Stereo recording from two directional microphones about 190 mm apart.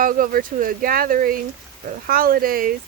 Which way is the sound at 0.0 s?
45° right (ahead or behind).